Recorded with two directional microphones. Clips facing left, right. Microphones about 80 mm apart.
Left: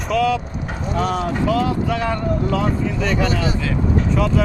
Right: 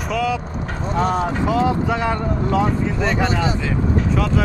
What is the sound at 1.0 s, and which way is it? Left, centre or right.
Speech, right.